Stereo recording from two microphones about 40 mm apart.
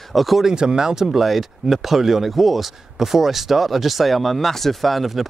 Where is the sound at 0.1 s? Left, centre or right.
Centre.